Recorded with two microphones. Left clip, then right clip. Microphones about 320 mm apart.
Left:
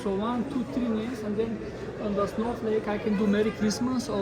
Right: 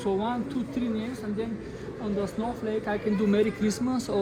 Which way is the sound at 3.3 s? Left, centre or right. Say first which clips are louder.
Right 2 dB; centre.